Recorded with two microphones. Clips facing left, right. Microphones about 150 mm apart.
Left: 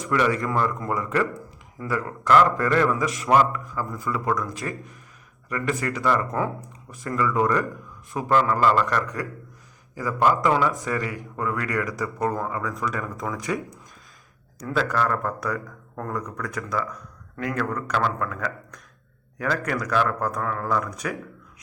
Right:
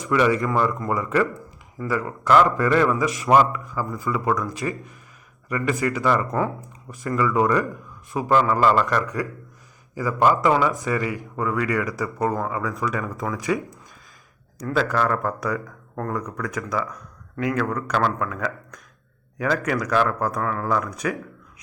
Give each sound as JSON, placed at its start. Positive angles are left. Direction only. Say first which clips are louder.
{"t": 0.1, "sound": "speech", "louder": "right 3 dB", "side_deg": -5}
{"t": 8.3, "sound": "speech", "louder": "right 2 dB", "side_deg": -15}
{"t": 14.8, "sound": "speech", "louder": "right 2 dB", "side_deg": 0}